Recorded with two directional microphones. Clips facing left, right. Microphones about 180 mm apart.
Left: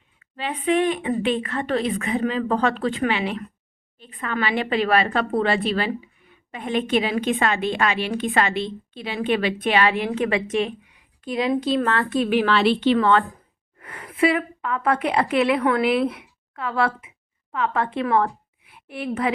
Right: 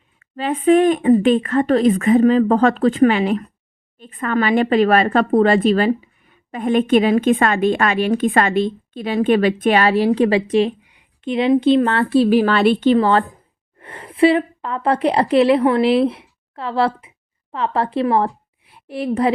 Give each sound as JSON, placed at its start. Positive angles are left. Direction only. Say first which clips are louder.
{"t": 0.2, "sound": "a woman's voice", "louder": "right 7 dB", "side_deg": -45}
{"t": 12.5, "sound": "a woman's voice", "louder": "right 4 dB", "side_deg": -50}